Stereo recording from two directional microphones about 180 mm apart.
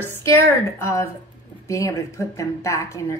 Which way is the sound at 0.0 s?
15° left (ahead or behind).